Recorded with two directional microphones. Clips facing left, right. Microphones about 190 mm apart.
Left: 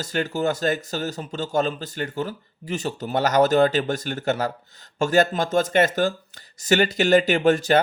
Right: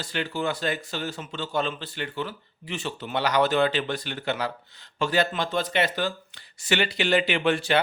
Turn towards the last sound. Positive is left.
turn(degrees=40)  # may be behind; listen again after turning